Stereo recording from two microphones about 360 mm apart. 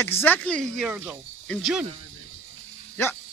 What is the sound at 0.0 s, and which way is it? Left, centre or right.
Speech, centre.